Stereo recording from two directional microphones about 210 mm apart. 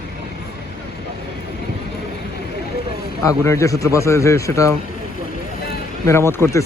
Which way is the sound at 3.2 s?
15° left (ahead or behind).